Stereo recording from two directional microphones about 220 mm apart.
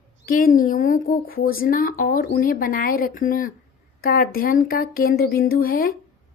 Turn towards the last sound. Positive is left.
turn(degrees=40)  # may be behind; listen again after turning